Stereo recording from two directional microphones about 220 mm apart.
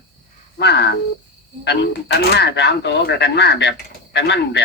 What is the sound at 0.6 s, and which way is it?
Speech, 50° left (ahead or behind).